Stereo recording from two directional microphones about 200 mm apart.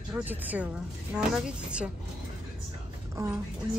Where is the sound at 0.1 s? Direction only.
10° right (ahead or behind).